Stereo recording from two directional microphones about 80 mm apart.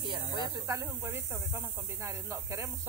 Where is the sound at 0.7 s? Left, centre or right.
Right.